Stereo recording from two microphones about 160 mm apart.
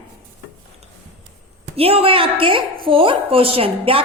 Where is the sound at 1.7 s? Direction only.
35° right (ahead or behind).